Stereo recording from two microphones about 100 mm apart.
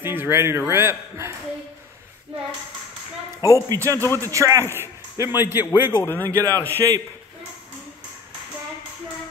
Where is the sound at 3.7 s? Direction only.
35° right (ahead or behind).